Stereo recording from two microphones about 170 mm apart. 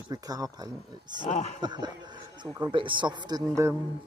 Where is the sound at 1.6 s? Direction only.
25° right (ahead or behind).